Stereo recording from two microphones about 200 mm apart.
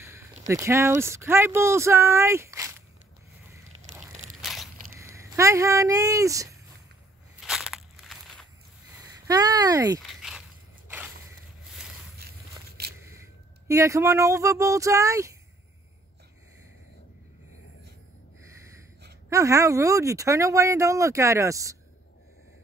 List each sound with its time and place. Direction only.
0.5 s speech: 15° right (ahead or behind)
3.7 s a sound: 25° right (ahead or behind)
4.4 s walk: centre (ahead or behind)
4.9 s speech: 15° right (ahead or behind)
7.3 s walk: 5° right (ahead or behind)
9.3 s speech: 20° right (ahead or behind)
9.9 s dog: centre (ahead or behind)
12.2 s walk: 50° right (ahead or behind)
13.7 s speech: 15° right (ahead or behind)
19.2 s speech: 15° right (ahead or behind)